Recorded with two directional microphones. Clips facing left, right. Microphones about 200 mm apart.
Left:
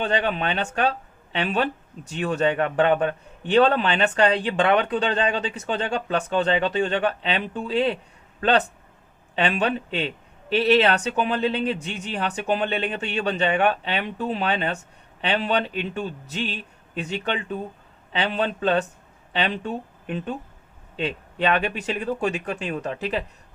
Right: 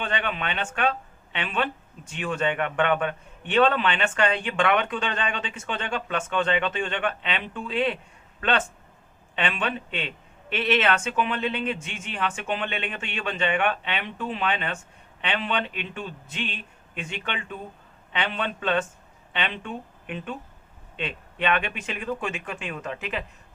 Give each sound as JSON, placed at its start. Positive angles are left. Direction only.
{"t": 0.0, "sound": "speech", "side_deg": 35}